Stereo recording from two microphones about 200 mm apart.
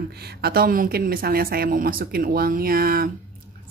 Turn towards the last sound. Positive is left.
turn(degrees=-45)  # may be behind; listen again after turning